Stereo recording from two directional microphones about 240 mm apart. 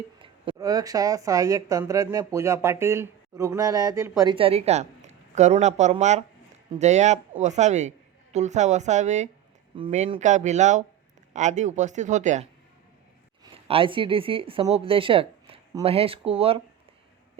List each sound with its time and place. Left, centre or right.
0.2 s a woman's voice: centre